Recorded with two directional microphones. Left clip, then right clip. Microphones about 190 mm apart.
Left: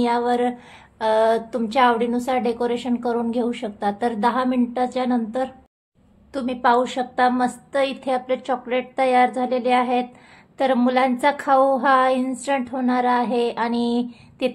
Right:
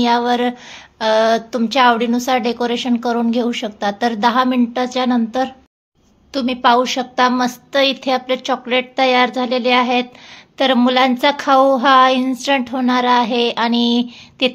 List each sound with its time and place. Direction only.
0.0 s speech: 20° right (ahead or behind)